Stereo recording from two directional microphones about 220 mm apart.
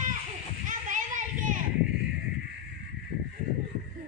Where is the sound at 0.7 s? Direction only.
35° right (ahead or behind).